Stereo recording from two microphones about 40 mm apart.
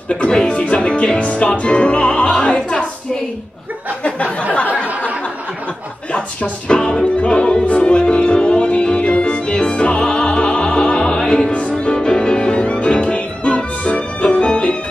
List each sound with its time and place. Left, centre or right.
0.1 s music: left
0.5 s a sound: left
0.7 s music: left
4.0 s a sound: left
6.7 s music: left
11.1 s opera: centre
11.7 s music: centre